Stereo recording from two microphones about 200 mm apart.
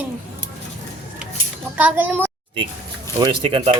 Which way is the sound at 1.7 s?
10° right (ahead or behind).